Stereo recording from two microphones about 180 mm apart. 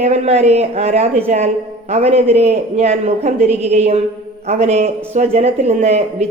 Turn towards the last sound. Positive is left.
turn(degrees=-40)  # may be behind; listen again after turning